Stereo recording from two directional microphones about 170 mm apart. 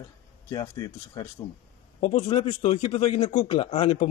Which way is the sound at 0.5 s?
20° left (ahead or behind).